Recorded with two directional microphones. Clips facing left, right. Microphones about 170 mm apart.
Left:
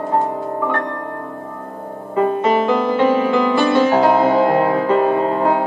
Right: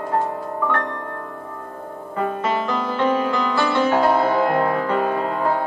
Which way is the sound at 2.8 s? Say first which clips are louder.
Left 5 dB; 15° left (ahead or behind).